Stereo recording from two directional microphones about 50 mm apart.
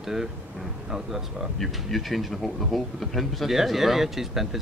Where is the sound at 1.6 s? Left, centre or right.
Centre.